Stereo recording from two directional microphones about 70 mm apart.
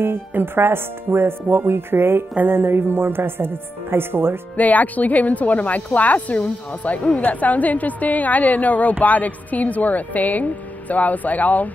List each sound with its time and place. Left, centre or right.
0.0 s music: right
4.6 s speech: left